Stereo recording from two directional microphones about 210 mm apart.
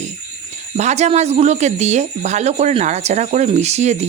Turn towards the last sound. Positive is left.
turn(degrees=-30)  # may be behind; listen again after turning